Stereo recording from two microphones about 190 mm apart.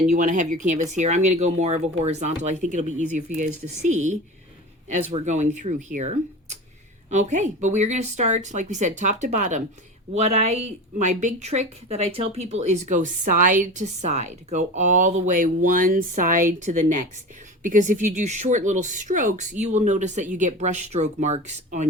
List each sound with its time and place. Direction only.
0.1 s a woman's voice: 40° right (ahead or behind)